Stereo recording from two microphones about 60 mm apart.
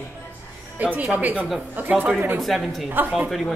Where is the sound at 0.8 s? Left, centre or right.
Right.